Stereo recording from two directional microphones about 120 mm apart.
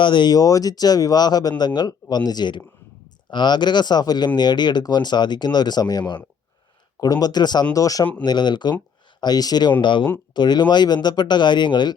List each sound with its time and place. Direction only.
0.0 s speech: 40° left (ahead or behind)